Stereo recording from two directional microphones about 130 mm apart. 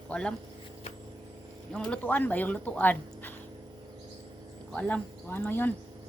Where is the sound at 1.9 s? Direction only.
15° left (ahead or behind).